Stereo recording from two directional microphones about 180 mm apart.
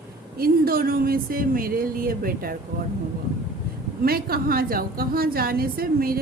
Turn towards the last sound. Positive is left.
turn(degrees=-55)  # may be behind; listen again after turning